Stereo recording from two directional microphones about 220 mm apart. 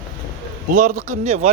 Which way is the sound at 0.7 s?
35° right (ahead or behind).